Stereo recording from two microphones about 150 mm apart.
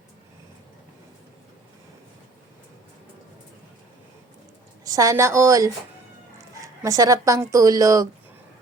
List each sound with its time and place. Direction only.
4.9 s speech: 20° right (ahead or behind)
6.8 s speech: 25° right (ahead or behind)